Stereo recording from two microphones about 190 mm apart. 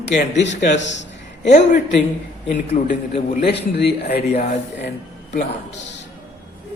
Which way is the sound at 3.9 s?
55° left (ahead or behind).